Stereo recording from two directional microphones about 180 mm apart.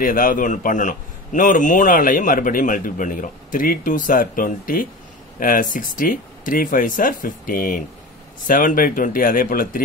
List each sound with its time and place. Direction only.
0.0 s a man's voice: 50° left (ahead or behind)